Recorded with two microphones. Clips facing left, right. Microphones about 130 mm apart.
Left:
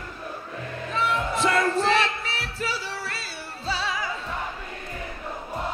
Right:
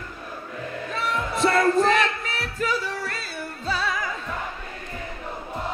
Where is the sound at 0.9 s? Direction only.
40° right (ahead or behind).